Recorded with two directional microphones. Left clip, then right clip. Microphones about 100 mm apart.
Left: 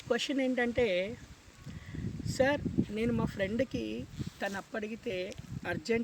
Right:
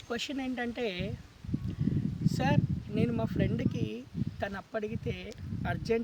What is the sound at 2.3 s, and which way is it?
Speech, 45° right (ahead or behind).